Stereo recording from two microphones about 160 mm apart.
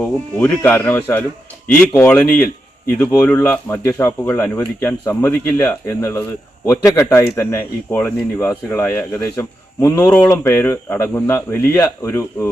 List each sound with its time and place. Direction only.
0.0 s speech: 5° left (ahead or behind)
4.4 s speech: 5° left (ahead or behind)
4.8 s speech: 15° left (ahead or behind)